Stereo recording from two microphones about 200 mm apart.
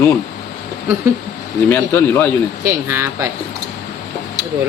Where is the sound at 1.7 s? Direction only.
10° left (ahead or behind).